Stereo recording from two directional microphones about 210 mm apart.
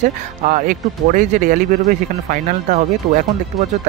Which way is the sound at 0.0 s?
40° right (ahead or behind).